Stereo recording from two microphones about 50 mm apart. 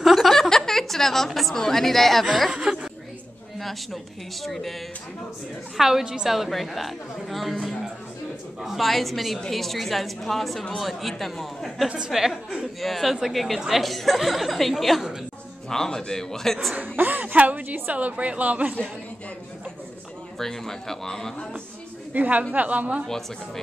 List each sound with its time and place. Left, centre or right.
0.0 s a sound: centre
0.4 s a woman's voice: centre
2.5 s a woman's voice: centre
3.5 s a woman's voice: centre
5.8 s a woman's voice: centre
8.6 s a woman's voice: centre
15.7 s speech: centre
16.7 s a woman's voice: right
20.3 s speech: centre
22.1 s a woman's voice: right
23.0 s speech: centre